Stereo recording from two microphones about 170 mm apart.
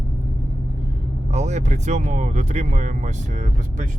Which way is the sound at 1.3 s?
40° right (ahead or behind).